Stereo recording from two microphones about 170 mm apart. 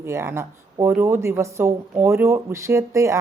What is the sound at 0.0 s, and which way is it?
A woman's voice, 15° right (ahead or behind).